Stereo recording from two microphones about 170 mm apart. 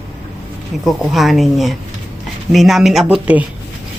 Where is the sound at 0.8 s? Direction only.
Centre (ahead or behind).